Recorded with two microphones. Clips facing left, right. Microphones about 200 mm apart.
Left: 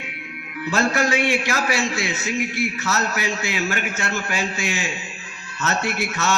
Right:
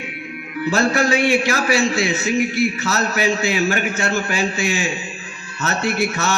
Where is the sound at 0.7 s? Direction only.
30° right (ahead or behind).